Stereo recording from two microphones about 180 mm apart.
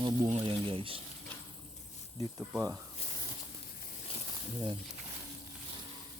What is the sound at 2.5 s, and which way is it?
Speech, 15° right (ahead or behind).